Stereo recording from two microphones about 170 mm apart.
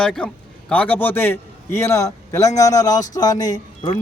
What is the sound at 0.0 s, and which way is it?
A man's voice, 5° left (ahead or behind).